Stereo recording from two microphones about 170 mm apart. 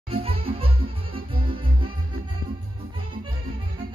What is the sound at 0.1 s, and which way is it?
Music, 35° right (ahead or behind).